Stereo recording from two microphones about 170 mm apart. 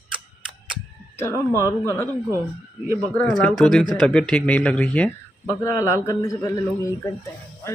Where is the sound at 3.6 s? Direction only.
Centre (ahead or behind).